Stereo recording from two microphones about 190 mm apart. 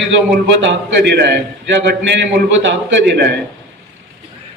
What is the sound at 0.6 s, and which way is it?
A man's voice, 65° right (ahead or behind).